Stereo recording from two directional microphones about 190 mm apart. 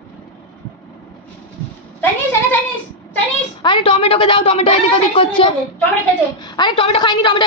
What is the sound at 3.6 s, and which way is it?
A woman's voice, 25° left (ahead or behind).